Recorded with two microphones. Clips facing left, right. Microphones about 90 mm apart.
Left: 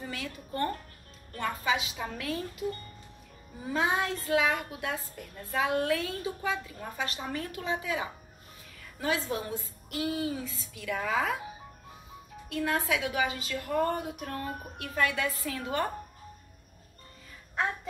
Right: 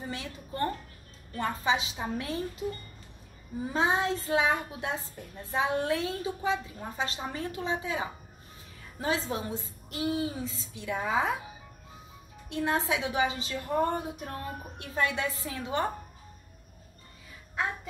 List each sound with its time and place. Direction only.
0.0 s a child's voice: 25° right (ahead or behind)
3.6 s a child's voice: 25° right (ahead or behind)
12.4 s a child's voice: 25° right (ahead or behind)